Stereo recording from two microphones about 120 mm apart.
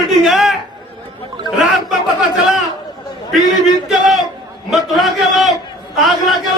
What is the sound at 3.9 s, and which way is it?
A man's voice, centre (ahead or behind).